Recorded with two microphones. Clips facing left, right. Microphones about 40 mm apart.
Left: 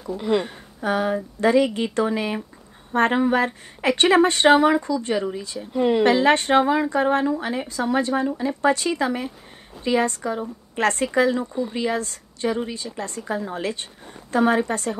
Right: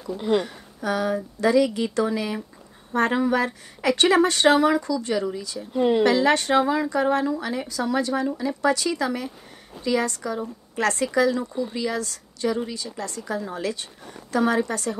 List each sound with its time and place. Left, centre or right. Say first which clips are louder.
0.3 s a woman's voice: even; left
5.8 s speech: left 1 dB; centre
6.0 s a woman's voice: left 2 dB; left